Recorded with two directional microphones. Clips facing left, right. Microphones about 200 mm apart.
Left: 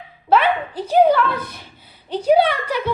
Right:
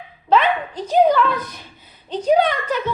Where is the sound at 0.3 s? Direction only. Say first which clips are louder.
Even; 10° left (ahead or behind).